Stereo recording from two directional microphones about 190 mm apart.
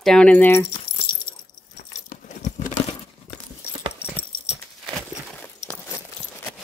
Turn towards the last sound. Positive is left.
turn(degrees=35)  # may be behind; listen again after turning